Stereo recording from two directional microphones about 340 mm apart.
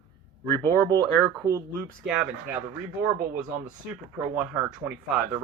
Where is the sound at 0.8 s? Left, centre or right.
Centre.